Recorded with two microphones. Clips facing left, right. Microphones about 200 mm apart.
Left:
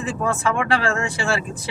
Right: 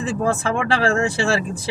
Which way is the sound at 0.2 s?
30° right (ahead or behind).